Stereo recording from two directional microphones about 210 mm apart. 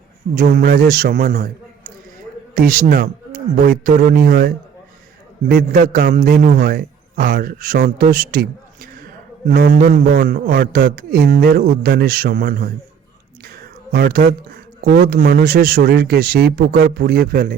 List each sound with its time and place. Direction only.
0.3 s a man's voice: 40° right (ahead or behind)
2.6 s a man's voice: 40° right (ahead or behind)
13.4 s a sound: 45° right (ahead or behind)
14.8 s a man's voice: 45° right (ahead or behind)